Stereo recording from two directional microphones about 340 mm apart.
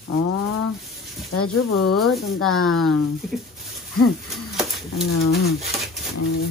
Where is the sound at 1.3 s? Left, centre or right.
Left.